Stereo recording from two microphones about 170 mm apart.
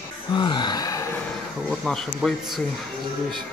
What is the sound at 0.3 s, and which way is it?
Gasp, 25° left (ahead or behind).